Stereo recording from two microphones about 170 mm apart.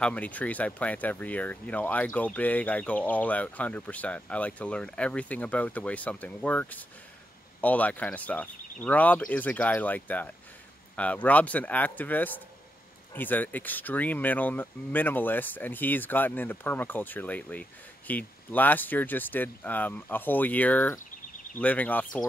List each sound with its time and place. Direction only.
0.0 s speech: 10° left (ahead or behind)